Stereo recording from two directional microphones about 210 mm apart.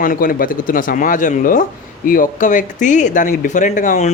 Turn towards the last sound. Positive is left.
turn(degrees=35)  # may be behind; listen again after turning